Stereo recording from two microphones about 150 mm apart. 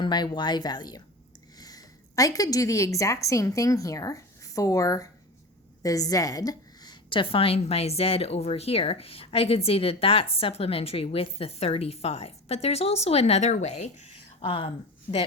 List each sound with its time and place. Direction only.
0.0 s a woman's voice: 30° left (ahead or behind); by 14.1 s 45° left (ahead or behind)
14.4 s a woman's voice: 35° left (ahead or behind)